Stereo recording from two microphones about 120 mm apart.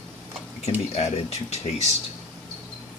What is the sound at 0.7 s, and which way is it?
Speech, 65° left (ahead or behind).